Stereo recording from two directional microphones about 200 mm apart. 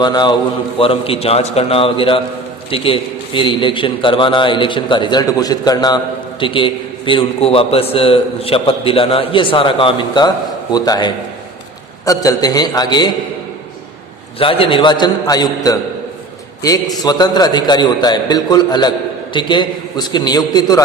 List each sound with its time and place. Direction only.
0.0 s a man's voice: 20° left (ahead or behind)
14.3 s a man's voice: 25° left (ahead or behind)